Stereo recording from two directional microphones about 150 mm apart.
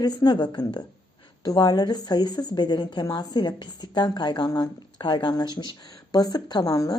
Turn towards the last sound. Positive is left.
turn(degrees=25)  # may be behind; listen again after turning